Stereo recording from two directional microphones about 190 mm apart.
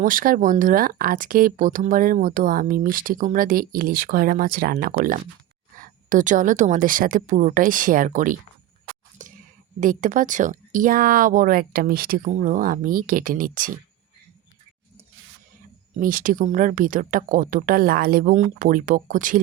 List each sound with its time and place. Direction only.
0.0 s speech: 45° right (ahead or behind)
9.2 s a sound: 40° right (ahead or behind)
9.8 s speech: 45° right (ahead or behind)
16.0 s speech: 45° right (ahead or behind)